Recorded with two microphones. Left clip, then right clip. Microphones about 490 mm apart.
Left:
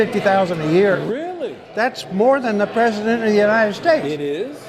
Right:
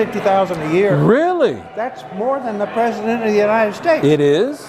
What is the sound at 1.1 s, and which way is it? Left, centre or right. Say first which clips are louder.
Speech: right 11 dB; right.